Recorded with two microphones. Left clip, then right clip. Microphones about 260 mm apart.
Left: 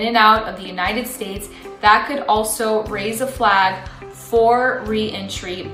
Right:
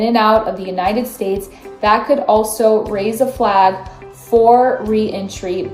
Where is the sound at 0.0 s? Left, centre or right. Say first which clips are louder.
Right 1 dB; left.